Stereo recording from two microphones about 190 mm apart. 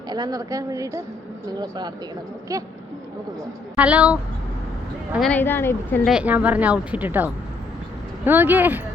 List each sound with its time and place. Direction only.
0.1 s a woman's voice: 20° right (ahead or behind)
3.8 s a woman's voice: 5° right (ahead or behind)
5.3 s speech: 10° left (ahead or behind)
6.1 s a woman's voice: 5° right (ahead or behind)